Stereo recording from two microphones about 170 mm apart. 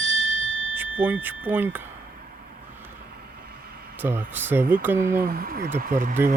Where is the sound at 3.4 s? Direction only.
65° right (ahead or behind).